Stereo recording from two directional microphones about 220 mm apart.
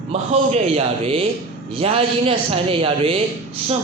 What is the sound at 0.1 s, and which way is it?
A man's voice, 30° right (ahead or behind).